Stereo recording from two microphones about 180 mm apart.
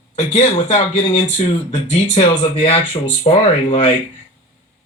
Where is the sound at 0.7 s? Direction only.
30° left (ahead or behind).